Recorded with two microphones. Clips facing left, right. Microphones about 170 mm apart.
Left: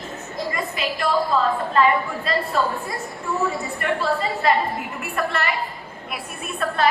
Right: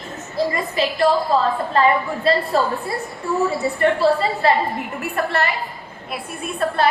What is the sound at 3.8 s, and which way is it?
A woman's voice, 35° right (ahead or behind).